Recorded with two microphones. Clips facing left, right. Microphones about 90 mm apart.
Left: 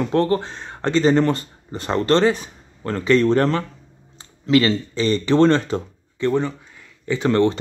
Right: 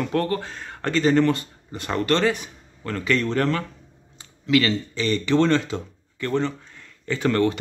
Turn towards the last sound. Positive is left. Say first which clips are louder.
# left 3 dB
turn(degrees=25)  # may be behind; listen again after turning